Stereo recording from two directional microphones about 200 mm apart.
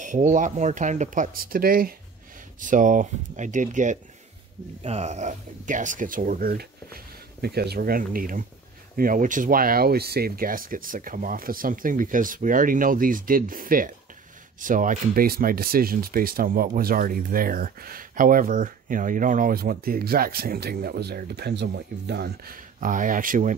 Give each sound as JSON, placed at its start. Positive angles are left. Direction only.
{"t": 0.0, "sound": "speech", "side_deg": -40}